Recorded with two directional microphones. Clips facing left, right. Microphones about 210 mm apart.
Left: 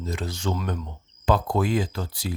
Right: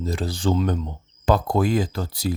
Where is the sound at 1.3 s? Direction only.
40° right (ahead or behind).